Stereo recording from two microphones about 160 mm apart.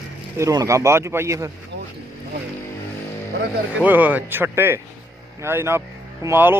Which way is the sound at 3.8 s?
10° right (ahead or behind).